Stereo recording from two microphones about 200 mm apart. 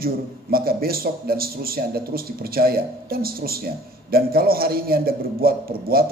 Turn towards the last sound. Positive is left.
turn(degrees=-50)  # may be behind; listen again after turning